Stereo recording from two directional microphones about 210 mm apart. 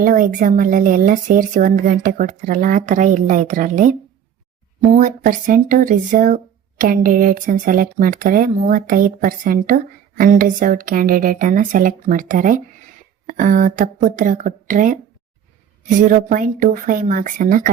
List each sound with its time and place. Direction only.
0.0 s speech: 40° right (ahead or behind)